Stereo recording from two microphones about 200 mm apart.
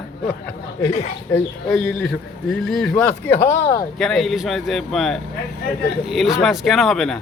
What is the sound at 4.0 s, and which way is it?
A man's voice, centre (ahead or behind).